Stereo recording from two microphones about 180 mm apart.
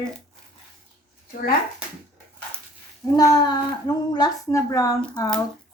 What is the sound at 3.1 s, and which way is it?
A child's voice, 20° left (ahead or behind).